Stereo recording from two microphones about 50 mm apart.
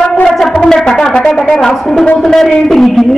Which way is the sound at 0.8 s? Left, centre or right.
Centre.